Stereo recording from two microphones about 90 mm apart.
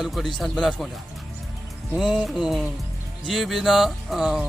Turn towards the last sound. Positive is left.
turn(degrees=-5)  # may be behind; listen again after turning